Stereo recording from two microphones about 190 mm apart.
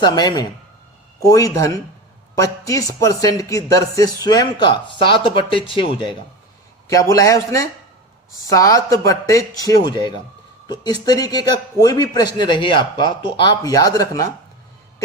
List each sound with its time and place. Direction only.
0.0 s a man's voice: 20° left (ahead or behind)